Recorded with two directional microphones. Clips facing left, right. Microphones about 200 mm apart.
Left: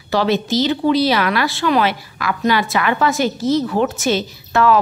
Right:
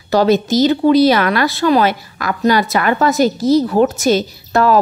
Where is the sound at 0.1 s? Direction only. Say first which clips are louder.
Right 5 dB; 40° right (ahead or behind).